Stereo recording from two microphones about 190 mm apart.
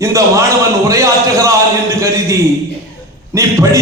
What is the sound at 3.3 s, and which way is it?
Speech, 15° right (ahead or behind).